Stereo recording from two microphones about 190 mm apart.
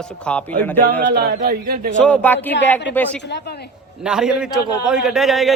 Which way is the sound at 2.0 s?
5° left (ahead or behind).